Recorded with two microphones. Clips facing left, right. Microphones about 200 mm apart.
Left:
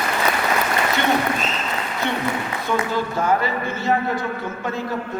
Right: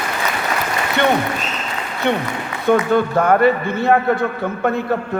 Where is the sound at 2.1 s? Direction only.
55° right (ahead or behind).